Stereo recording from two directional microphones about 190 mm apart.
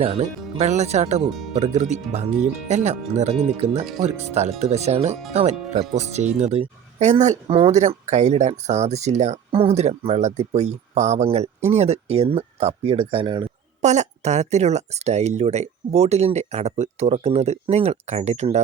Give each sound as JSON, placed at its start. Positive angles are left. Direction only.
{"t": 0.0, "sound": "speech", "side_deg": -35}
{"t": 1.3, "sound": "speech", "side_deg": 0}
{"t": 1.5, "sound": "speech", "side_deg": -35}
{"t": 13.8, "sound": "speech", "side_deg": -40}